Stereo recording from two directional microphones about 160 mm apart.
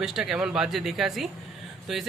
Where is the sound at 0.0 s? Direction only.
Centre (ahead or behind).